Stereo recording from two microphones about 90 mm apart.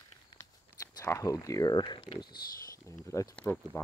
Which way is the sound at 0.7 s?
35° left (ahead or behind).